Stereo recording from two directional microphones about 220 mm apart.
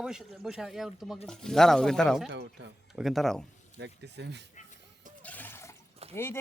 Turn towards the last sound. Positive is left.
turn(degrees=10)  # may be behind; listen again after turning